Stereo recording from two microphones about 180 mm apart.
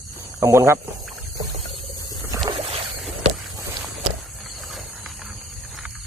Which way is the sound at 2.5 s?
30° right (ahead or behind).